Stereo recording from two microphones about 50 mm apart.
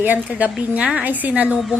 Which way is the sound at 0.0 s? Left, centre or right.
Right.